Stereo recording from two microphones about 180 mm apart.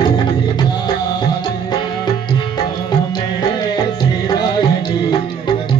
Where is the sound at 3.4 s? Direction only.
20° left (ahead or behind).